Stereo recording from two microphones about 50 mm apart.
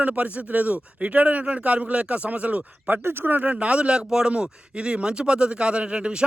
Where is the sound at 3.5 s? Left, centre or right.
Right.